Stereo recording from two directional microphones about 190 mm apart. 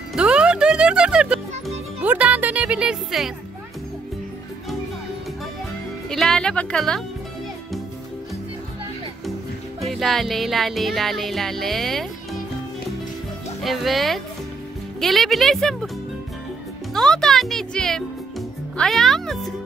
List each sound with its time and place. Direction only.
0.1 s music: 5° right (ahead or behind)
6.0 s speech: centre (ahead or behind)
9.8 s music: centre (ahead or behind)
13.6 s music: centre (ahead or behind)
16.9 s music: 5° left (ahead or behind)